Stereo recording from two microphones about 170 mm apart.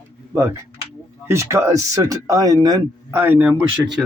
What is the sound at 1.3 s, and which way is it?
Speech, 15° right (ahead or behind).